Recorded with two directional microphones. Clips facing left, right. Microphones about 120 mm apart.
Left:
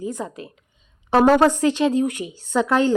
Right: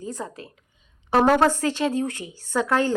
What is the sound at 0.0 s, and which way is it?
A woman's voice, 15° left (ahead or behind).